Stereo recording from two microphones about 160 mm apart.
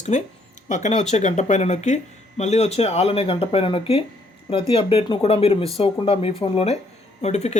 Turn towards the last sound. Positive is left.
turn(degrees=45)  # may be behind; listen again after turning